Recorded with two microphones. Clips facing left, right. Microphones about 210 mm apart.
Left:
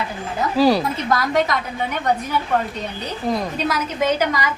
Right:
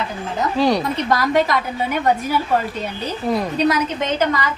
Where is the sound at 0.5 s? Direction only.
5° left (ahead or behind).